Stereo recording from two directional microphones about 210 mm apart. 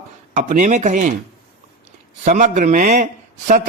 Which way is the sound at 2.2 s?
35° right (ahead or behind).